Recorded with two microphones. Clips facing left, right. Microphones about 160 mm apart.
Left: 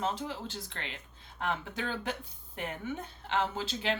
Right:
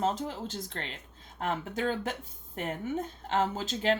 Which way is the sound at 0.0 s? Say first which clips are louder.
Right 4 dB; 45° right (ahead or behind).